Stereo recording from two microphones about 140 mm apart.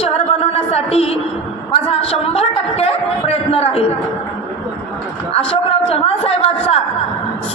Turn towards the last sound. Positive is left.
turn(degrees=45)  # may be behind; listen again after turning